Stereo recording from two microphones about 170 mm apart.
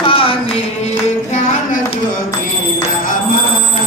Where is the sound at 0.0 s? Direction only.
30° left (ahead or behind).